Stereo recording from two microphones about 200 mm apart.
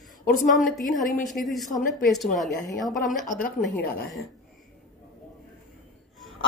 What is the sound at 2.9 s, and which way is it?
Speech, 45° left (ahead or behind).